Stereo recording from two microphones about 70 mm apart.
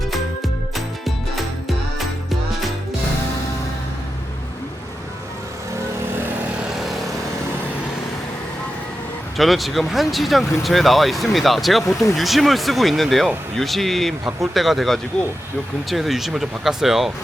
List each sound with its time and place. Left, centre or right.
6.1 s vehicle: right
6.7 s vehicle: centre
9.4 s speech: centre